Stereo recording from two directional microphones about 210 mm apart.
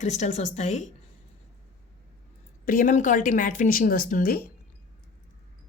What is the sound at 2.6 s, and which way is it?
Speech, 40° left (ahead or behind).